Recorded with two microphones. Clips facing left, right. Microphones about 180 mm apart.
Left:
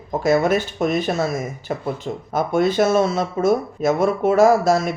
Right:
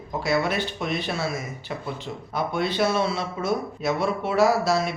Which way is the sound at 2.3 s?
45° left (ahead or behind).